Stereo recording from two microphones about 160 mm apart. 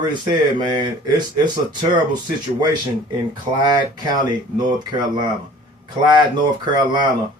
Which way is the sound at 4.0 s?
25° right (ahead or behind).